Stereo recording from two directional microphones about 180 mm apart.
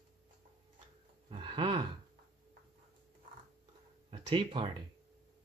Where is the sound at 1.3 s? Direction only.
30° right (ahead or behind).